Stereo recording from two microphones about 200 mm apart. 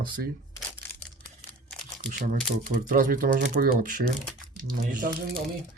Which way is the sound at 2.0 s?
40° right (ahead or behind).